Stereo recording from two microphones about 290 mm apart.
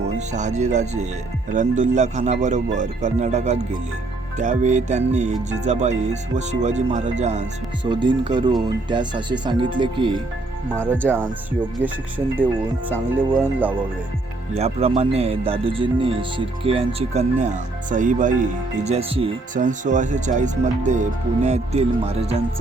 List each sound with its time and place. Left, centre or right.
0.6 s speech: right; by 11.3 s centre
14.5 s speech: right